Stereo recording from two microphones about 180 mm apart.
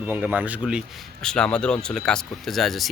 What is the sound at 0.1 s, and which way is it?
Speech, 10° right (ahead or behind).